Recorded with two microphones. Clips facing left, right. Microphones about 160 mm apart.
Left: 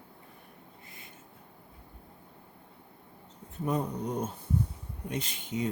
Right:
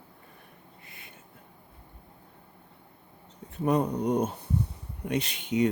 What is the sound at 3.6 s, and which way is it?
Speech, 70° right (ahead or behind).